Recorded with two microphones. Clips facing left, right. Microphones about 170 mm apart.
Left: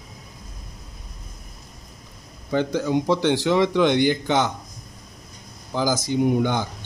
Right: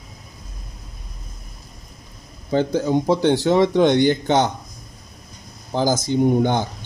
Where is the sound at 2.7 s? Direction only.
45° right (ahead or behind).